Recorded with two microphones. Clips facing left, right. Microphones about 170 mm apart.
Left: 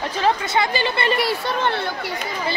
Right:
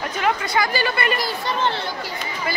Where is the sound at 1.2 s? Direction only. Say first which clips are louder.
Left 2 dB; 65° left (ahead or behind).